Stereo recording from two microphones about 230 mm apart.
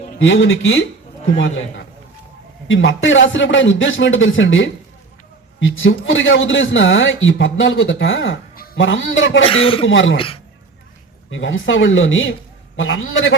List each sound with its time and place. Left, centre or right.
0.2 s a man's voice: left
8.5 s bleat: left
8.8 s a man's voice: left
9.4 s a man's voice: left
9.8 s a man's voice: left
10.2 s a woman's voice: left
11.3 s a man's voice: left